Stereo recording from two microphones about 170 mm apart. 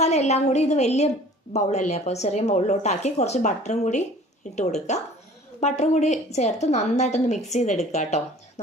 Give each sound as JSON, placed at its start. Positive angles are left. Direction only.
{"t": 0.0, "sound": "a woman's voice", "side_deg": 40}